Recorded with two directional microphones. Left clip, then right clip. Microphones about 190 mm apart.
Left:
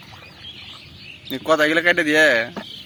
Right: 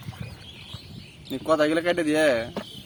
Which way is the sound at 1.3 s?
Centre (ahead or behind).